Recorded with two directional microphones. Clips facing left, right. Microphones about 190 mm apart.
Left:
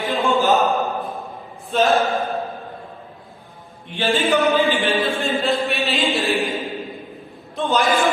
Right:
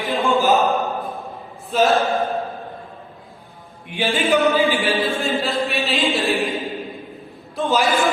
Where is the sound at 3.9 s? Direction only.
15° right (ahead or behind).